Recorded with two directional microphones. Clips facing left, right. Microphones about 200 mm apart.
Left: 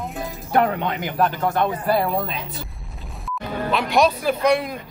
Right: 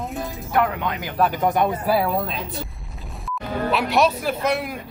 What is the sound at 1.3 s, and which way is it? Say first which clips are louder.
Speech: right 1 dB; 15° right (ahead or behind).